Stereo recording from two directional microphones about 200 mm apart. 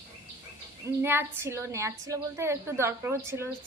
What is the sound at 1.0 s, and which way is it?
A woman's voice, 10° right (ahead or behind).